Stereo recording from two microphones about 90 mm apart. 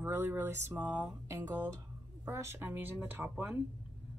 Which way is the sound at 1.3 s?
30° right (ahead or behind).